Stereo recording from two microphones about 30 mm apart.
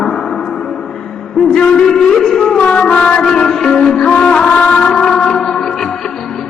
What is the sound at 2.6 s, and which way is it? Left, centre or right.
Music, left.